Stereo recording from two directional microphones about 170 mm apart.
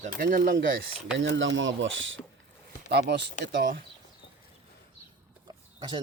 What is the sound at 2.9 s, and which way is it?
Speech, 75° right (ahead or behind).